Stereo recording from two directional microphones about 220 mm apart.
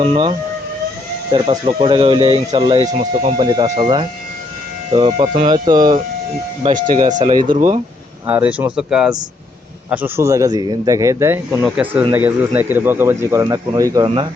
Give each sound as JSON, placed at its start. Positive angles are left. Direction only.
{"t": 0.0, "sound": "speech", "side_deg": -25}
{"t": 6.7, "sound": "speech", "side_deg": -35}
{"t": 7.3, "sound": "speech", "side_deg": -20}
{"t": 8.3, "sound": "speech", "side_deg": -5}